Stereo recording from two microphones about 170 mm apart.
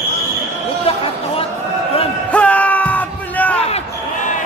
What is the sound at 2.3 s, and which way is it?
Music, 10° left (ahead or behind).